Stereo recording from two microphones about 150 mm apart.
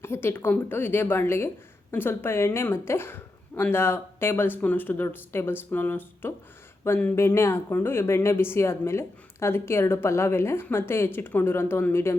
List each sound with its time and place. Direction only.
0.0 s speech: 15° left (ahead or behind)